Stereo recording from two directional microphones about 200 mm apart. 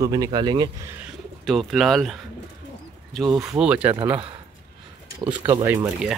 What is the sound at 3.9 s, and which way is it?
Speech, 15° right (ahead or behind).